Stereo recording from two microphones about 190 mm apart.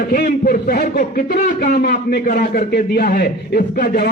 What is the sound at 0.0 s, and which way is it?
A man's voice, 45° left (ahead or behind).